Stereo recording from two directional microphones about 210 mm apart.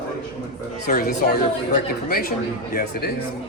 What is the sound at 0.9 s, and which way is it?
A woman's voice, 45° left (ahead or behind).